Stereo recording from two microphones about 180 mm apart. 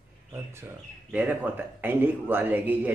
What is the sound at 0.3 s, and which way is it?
Speech, 15° right (ahead or behind).